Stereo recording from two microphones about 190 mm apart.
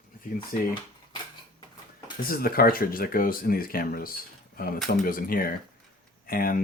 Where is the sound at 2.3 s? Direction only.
50° left (ahead or behind).